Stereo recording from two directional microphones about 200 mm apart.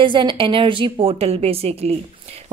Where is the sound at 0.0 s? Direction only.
25° right (ahead or behind).